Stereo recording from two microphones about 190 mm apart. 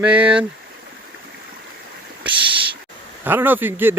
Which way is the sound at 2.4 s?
25° right (ahead or behind).